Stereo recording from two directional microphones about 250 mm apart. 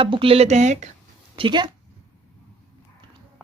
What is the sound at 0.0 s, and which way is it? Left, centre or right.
Speech, right.